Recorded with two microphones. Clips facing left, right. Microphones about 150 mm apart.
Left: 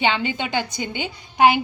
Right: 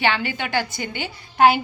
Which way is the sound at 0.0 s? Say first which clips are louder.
Left 1 dB; 20° left (ahead or behind).